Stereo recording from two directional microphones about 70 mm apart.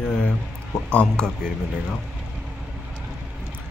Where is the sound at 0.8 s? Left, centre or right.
Centre.